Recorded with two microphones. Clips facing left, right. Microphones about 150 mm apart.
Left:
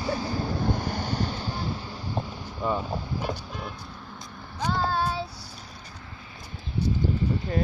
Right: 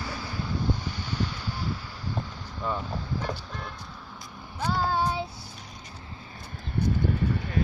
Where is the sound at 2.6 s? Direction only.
15° left (ahead or behind).